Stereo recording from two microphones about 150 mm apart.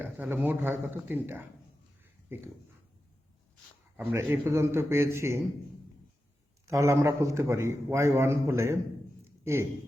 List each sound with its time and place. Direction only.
0.0 s a man's voice: 10° right (ahead or behind)
3.9 s a man's voice: 15° right (ahead or behind)
6.7 s a man's voice: 20° right (ahead or behind)
9.2 s a sound: 15° right (ahead or behind)